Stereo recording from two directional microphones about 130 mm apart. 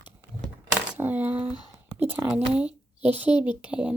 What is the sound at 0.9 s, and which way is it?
Speech, 15° right (ahead or behind).